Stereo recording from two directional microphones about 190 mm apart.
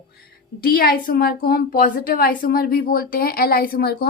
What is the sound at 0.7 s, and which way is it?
A woman's voice, 50° left (ahead or behind).